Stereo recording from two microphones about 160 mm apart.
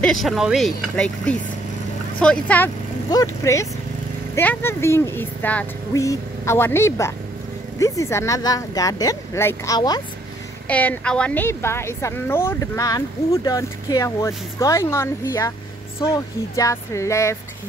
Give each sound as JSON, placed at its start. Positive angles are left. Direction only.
{"t": 0.0, "sound": "speech", "side_deg": 0}
{"t": 3.1, "sound": "speech", "side_deg": 20}
{"t": 9.8, "sound": "speech", "side_deg": 25}
{"t": 10.7, "sound": "speech", "side_deg": 10}